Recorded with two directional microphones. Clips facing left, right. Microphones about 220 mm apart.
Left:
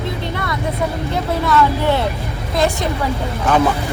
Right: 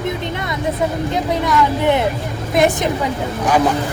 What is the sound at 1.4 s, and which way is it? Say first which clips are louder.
Speech: left 1 dB; 15° right (ahead or behind).